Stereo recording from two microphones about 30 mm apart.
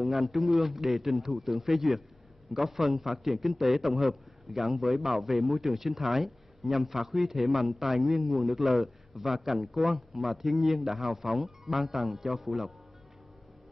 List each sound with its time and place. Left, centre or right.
0.0 s a man's voice: centre